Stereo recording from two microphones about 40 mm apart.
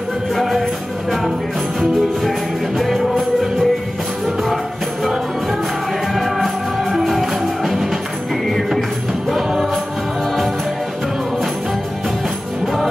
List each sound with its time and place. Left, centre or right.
0.4 s music: centre
2.8 s music: centre
6.1 s music: centre
9.3 s music: centre